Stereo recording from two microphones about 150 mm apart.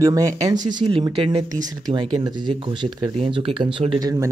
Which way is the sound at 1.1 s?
40° right (ahead or behind).